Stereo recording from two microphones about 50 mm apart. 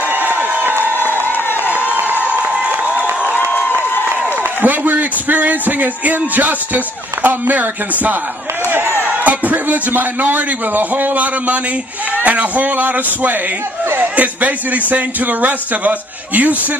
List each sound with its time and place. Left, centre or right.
0.1 s crowd: right
0.9 s crowd: left
2.5 s a sound: centre
3.3 s a sound: left
4.6 s a man's voice: right
8.6 s speech: right
9.2 s a man's voice: right